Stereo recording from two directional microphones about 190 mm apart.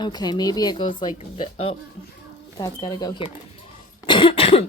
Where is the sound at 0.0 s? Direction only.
20° left (ahead or behind).